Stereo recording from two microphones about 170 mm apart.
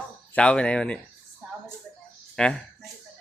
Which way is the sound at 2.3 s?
5° left (ahead or behind).